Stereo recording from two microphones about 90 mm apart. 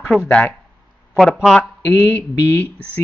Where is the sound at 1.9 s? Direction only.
25° left (ahead or behind).